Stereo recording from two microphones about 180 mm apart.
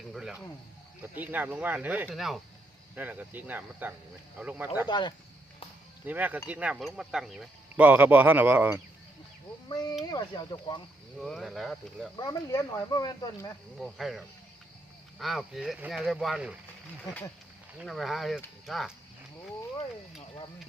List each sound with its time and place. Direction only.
0.1 s speech: centre (ahead or behind)
4.9 s speech: 25° left (ahead or behind)
6.1 s speech: 10° right (ahead or behind)
9.6 s speech: 20° left (ahead or behind)
11.2 s speech: centre (ahead or behind)
12.2 s speech: 20° left (ahead or behind)
13.7 s speech: centre (ahead or behind)
17.7 s speech: centre (ahead or behind)